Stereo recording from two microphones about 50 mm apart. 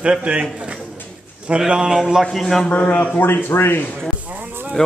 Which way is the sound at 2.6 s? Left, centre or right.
Left.